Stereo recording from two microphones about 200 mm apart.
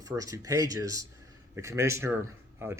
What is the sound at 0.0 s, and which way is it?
A man's voice, 15° right (ahead or behind).